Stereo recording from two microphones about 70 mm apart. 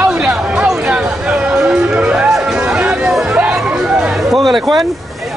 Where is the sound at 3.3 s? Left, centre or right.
Centre.